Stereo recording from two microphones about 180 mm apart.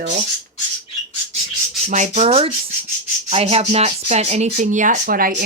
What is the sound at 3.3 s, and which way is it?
Speech, 35° right (ahead or behind).